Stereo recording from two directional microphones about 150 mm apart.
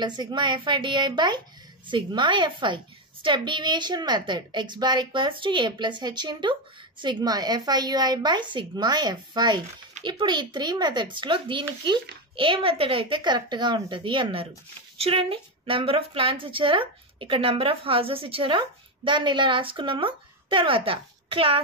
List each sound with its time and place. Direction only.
0.0 s a woman's voice: 30° right (ahead or behind)